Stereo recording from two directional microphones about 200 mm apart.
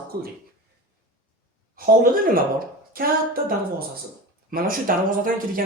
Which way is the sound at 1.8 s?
45° right (ahead or behind).